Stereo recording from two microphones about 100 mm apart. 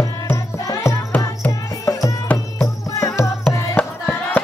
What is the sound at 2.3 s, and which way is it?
Music, 15° left (ahead or behind).